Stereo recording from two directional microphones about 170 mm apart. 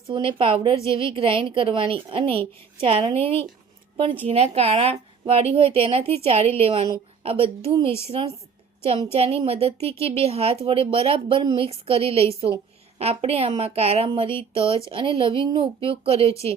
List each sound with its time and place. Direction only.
0.1 s a woman's voice: 30° right (ahead or behind)